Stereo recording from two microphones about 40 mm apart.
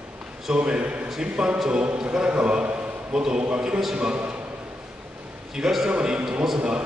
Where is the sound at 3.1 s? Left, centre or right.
Centre.